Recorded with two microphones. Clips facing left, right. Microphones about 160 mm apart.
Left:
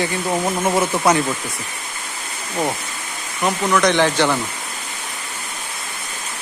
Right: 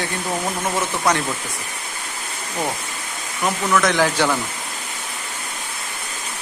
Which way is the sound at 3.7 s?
Centre (ahead or behind).